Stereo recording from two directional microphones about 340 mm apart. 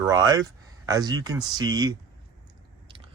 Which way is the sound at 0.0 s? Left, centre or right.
Centre.